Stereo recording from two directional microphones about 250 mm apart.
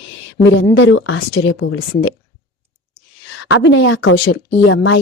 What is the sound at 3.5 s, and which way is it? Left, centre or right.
A woman's voice, left.